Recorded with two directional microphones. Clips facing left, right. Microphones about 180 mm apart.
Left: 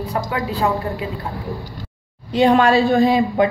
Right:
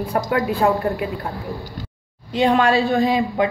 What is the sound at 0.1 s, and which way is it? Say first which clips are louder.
Speech: right 4 dB; 55° right (ahead or behind).